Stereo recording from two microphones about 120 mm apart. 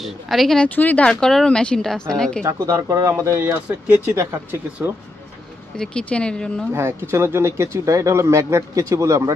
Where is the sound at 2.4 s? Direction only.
25° right (ahead or behind).